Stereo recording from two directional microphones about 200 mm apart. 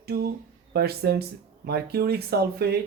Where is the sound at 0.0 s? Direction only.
50° right (ahead or behind).